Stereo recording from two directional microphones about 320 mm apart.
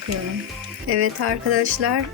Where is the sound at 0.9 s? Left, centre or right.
Right.